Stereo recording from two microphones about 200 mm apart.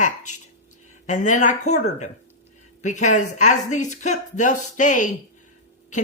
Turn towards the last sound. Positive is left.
turn(degrees=40)  # may be behind; listen again after turning